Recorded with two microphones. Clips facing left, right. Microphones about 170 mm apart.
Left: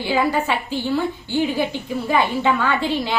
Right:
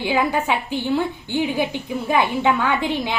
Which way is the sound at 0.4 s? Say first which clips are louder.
Right 1 dB; 15° right (ahead or behind).